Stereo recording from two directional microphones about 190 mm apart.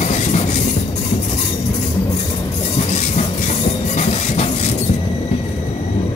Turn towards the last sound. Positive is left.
turn(degrees=35)  # may be behind; listen again after turning